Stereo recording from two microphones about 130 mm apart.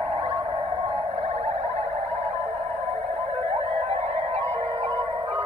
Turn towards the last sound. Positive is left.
turn(degrees=-40)  # may be behind; listen again after turning